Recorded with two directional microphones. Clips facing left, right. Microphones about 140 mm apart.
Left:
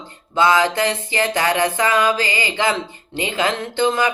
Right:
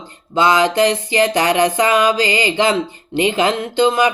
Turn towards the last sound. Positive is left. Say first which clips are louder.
# right 4 dB
turn(degrees=-15)  # may be behind; listen again after turning